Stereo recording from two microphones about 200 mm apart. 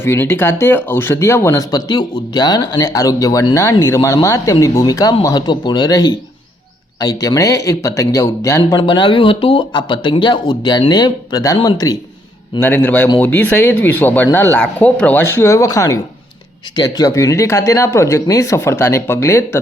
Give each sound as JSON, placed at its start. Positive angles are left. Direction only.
{"t": 0.0, "sound": "speech", "side_deg": 10}